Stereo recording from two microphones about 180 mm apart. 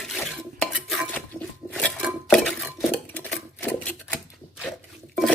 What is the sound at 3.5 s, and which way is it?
Typewriter, 10° left (ahead or behind).